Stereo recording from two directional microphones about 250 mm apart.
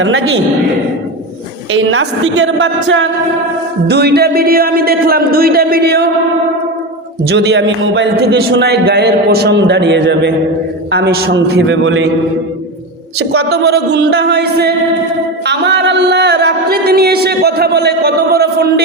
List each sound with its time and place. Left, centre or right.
1.7 s a man's voice: right
7.3 s a man's voice: right
13.4 s speech: right